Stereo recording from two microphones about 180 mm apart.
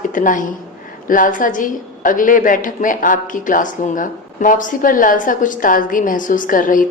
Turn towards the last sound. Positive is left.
turn(degrees=50)  # may be behind; listen again after turning